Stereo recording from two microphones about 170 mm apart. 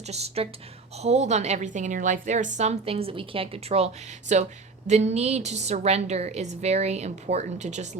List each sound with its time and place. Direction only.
0.1 s a woman's voice: 40° right (ahead or behind)